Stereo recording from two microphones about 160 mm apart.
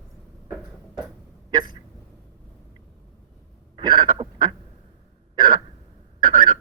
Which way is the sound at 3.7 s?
30° right (ahead or behind).